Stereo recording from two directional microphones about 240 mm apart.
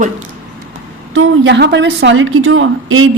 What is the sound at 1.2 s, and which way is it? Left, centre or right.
A woman's voice, right.